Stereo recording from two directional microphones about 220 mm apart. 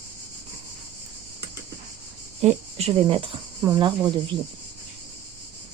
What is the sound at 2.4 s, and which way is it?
Speech, 30° right (ahead or behind).